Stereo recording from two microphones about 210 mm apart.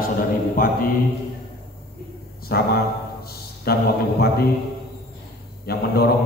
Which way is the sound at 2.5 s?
45° left (ahead or behind).